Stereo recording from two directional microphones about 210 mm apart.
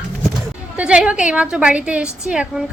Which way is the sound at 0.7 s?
5° right (ahead or behind).